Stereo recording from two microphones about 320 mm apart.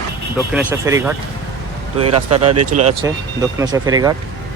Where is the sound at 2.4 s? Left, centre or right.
Right.